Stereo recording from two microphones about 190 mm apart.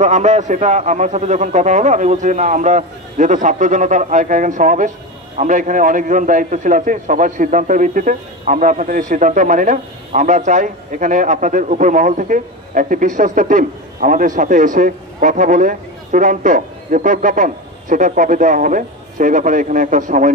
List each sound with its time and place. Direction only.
0.0 s a man's voice: 40° right (ahead or behind)